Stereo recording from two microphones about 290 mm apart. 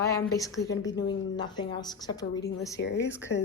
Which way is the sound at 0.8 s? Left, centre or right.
Left.